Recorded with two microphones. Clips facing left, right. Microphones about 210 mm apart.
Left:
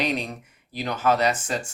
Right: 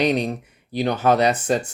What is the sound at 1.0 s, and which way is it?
Speech, 35° right (ahead or behind).